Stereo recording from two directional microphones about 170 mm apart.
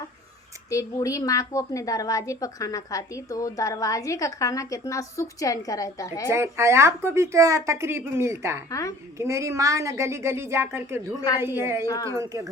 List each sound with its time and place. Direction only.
0.7 s a woman's voice: 20° left (ahead or behind)
6.2 s speech: 15° right (ahead or behind)
8.7 s a woman's voice: 20° left (ahead or behind)
9.1 s speech: 15° right (ahead or behind)